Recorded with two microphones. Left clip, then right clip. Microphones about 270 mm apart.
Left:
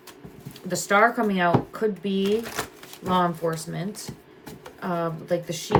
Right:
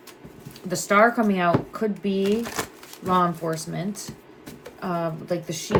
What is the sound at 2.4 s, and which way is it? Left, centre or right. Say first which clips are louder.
Crumpling: right 2 dB; centre.